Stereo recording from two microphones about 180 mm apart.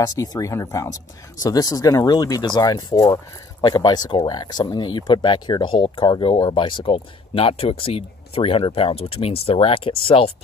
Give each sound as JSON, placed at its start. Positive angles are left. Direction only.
{"t": 0.0, "sound": "speech", "side_deg": 20}